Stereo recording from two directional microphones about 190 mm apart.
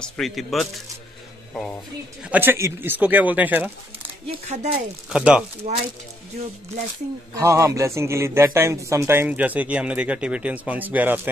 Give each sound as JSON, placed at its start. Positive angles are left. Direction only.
{"t": 0.0, "sound": "speech", "side_deg": 0}
{"t": 2.2, "sound": "a man's voice", "side_deg": -10}
{"t": 4.3, "sound": "speech", "side_deg": -30}
{"t": 5.1, "sound": "speech", "side_deg": -5}
{"t": 7.3, "sound": "a man's voice", "side_deg": -15}